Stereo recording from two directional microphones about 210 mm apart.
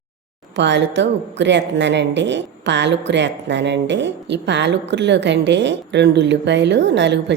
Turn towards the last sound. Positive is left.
turn(degrees=-55)  # may be behind; listen again after turning